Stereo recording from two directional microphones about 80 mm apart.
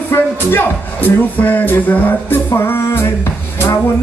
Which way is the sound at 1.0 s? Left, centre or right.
Left.